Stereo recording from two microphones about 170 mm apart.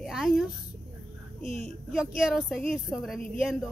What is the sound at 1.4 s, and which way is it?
Speech, 40° right (ahead or behind).